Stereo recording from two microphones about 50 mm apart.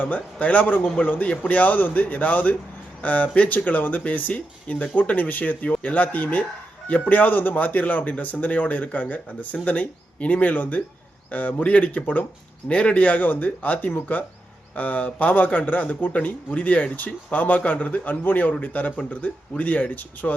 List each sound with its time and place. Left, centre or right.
0.0 s speech: left
12.6 s speech: left